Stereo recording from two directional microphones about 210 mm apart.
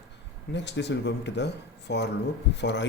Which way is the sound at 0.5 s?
55° left (ahead or behind).